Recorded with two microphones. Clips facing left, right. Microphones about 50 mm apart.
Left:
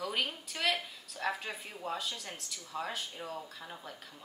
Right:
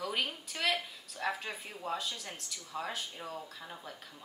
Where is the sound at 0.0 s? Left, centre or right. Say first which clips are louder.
Even; centre.